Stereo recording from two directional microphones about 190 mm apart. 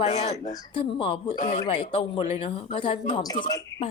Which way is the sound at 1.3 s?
40° left (ahead or behind).